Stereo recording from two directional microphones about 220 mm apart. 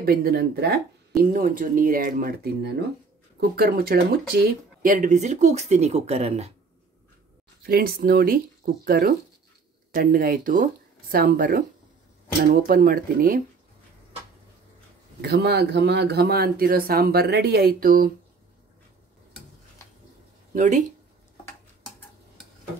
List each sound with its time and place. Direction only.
0.0 s speech: 45° right (ahead or behind)
7.6 s speech: 45° right (ahead or behind)
15.2 s speech: 45° right (ahead or behind)
20.5 s speech: 35° right (ahead or behind)